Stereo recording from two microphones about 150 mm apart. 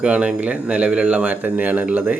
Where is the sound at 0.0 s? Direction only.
10° right (ahead or behind).